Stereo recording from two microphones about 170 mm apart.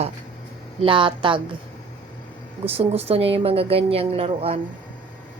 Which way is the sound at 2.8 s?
35° right (ahead or behind).